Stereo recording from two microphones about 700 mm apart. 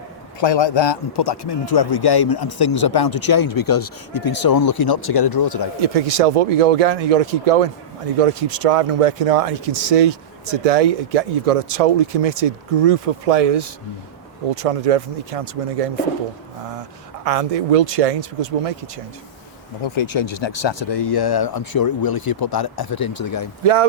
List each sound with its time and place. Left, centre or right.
0.3 s speech: left
5.8 s speech: right
17.2 s speech: right
19.8 s speech: left